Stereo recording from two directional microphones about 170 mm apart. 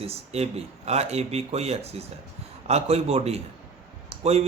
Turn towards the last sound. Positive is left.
turn(degrees=-40)  # may be behind; listen again after turning